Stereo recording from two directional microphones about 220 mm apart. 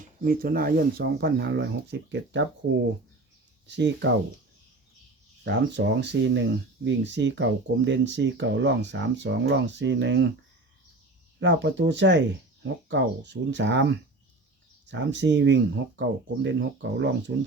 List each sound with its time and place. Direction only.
0.3 s speech: 40° right (ahead or behind)
3.7 s speech: 50° right (ahead or behind)
5.5 s speech: 55° right (ahead or behind)
11.3 s speech: 55° right (ahead or behind)
14.8 s speech: 55° right (ahead or behind)